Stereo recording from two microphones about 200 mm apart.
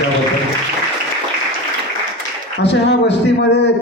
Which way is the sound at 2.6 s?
60° left (ahead or behind).